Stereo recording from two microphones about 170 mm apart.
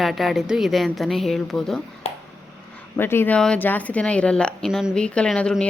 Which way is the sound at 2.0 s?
35° left (ahead or behind).